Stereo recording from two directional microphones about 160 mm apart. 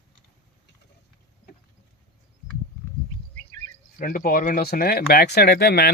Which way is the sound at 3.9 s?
60° left (ahead or behind).